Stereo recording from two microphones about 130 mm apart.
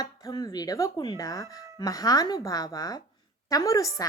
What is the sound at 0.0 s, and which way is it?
Speech, 30° left (ahead or behind).